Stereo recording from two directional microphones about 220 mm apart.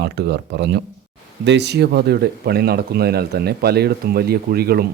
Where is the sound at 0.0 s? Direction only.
50° right (ahead or behind).